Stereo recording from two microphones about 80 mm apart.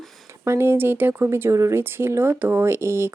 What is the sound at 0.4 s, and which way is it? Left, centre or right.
Speech, right.